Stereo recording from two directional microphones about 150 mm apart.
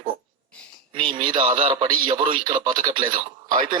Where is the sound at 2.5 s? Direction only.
60° right (ahead or behind).